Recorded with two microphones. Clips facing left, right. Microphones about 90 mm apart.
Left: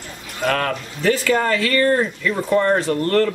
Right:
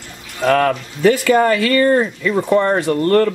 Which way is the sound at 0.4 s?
10° right (ahead or behind).